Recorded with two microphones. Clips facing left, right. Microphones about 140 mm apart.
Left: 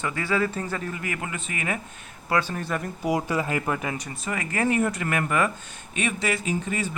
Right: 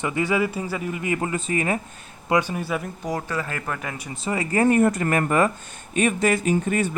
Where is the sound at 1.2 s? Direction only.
35° right (ahead or behind).